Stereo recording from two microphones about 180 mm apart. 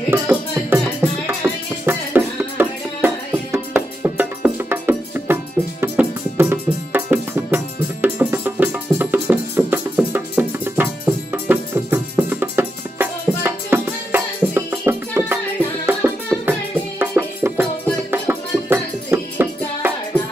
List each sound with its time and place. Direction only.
0.1 s music: 10° right (ahead or behind)